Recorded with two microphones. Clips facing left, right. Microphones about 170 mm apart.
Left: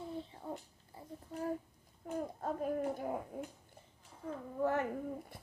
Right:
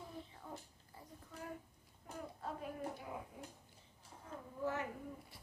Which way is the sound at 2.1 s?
45° left (ahead or behind).